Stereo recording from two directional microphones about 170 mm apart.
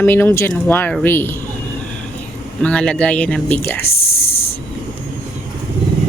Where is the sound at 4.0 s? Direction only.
35° left (ahead or behind).